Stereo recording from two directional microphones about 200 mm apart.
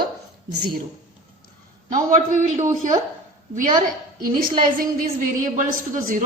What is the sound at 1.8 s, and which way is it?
Speech, 40° right (ahead or behind).